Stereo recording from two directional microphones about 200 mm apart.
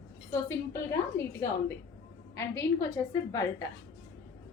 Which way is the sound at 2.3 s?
15° left (ahead or behind).